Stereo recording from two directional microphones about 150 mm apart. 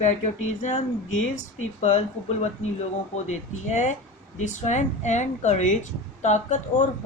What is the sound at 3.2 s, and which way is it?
Speech, 50° left (ahead or behind).